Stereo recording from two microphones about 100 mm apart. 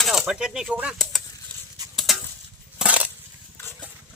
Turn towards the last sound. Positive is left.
turn(degrees=-15)  # may be behind; listen again after turning